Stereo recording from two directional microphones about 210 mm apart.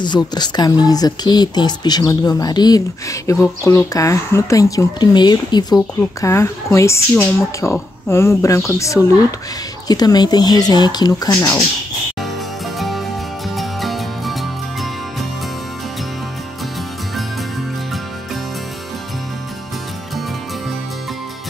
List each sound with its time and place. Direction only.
0.0 s speech: 20° left (ahead or behind)
12.7 s music: centre (ahead or behind)